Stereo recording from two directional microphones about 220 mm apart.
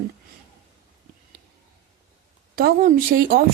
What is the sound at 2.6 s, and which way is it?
Speech, 40° right (ahead or behind).